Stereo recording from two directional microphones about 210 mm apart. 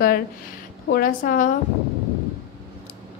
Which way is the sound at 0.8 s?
45° left (ahead or behind).